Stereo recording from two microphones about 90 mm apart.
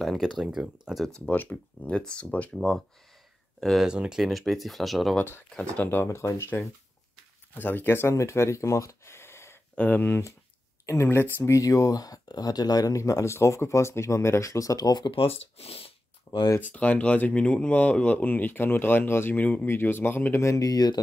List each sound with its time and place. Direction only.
0.0 s speech: centre (ahead or behind)
1.3 s speech: 20° left (ahead or behind)
3.6 s speech: 5° right (ahead or behind)
5.1 s speech: 20° left (ahead or behind)
5.5 s speech: 10° left (ahead or behind)
6.0 s speech: 35° left (ahead or behind); by 15.1 s 50° left (ahead or behind)
15.1 s speech: 90° left
16.3 s speech: 55° left (ahead or behind)
16.5 s speech: 15° left (ahead or behind); by 21.0 s 50° left (ahead or behind)